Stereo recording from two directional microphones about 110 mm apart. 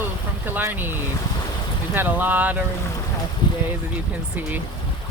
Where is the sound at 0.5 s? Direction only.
20° right (ahead or behind).